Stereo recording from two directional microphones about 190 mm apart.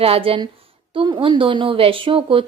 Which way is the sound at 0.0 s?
30° right (ahead or behind).